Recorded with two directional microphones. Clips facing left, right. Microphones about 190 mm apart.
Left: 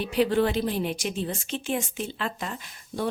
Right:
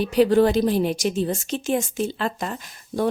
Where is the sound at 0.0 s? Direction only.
40° right (ahead or behind).